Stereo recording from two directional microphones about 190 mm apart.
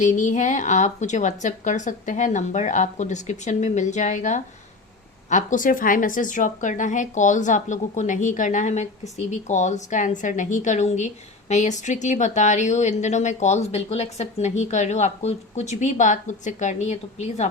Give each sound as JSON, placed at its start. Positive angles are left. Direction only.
{"t": 0.0, "sound": "a woman's voice", "side_deg": 40}